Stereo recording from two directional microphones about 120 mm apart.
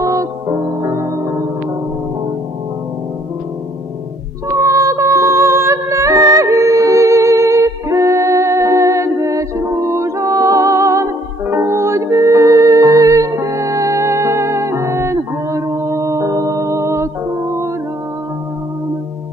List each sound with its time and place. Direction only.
0.0 s music: 25° right (ahead or behind)
4.6 s music: 25° right (ahead or behind)